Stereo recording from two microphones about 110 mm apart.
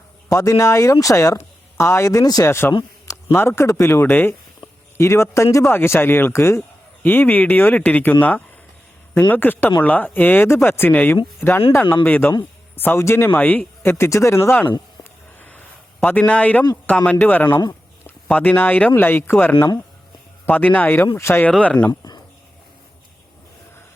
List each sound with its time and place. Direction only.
0.3 s speech: 30° left (ahead or behind)
9.3 s speech: 15° left (ahead or behind)
15.4 s a sound: 15° left (ahead or behind)
16.0 s speech: 15° left (ahead or behind)